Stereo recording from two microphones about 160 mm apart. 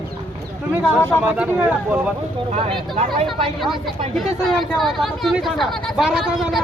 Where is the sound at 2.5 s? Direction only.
40° right (ahead or behind).